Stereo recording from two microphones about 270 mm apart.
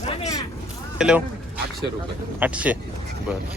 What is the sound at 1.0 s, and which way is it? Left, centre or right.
Speech, centre.